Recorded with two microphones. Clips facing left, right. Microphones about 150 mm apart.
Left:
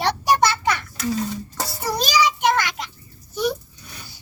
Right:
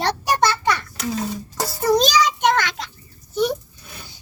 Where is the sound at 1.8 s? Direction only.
5° left (ahead or behind).